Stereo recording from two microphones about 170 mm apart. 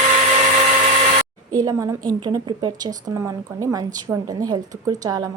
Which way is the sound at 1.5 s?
20° right (ahead or behind).